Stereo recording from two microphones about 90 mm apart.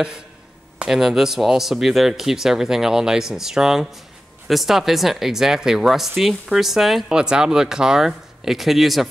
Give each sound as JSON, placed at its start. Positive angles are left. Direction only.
{"t": 0.7, "sound": "speech", "side_deg": -5}